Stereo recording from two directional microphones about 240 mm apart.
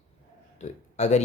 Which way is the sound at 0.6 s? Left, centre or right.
Left.